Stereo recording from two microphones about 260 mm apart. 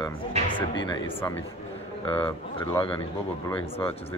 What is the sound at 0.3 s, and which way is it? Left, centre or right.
Music, right.